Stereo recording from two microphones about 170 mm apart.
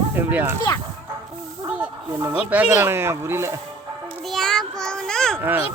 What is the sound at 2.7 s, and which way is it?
Speech, 15° right (ahead or behind).